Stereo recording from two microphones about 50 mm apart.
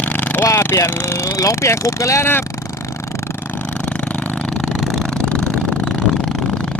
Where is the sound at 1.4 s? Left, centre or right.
Left.